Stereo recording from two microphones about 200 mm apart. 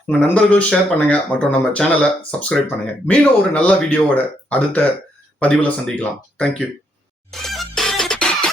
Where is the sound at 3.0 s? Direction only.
5° left (ahead or behind).